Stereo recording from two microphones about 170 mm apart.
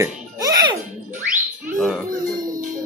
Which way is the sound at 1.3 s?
5° right (ahead or behind).